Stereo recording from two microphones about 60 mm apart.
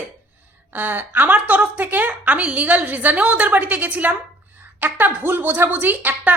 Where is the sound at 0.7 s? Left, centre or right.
Right.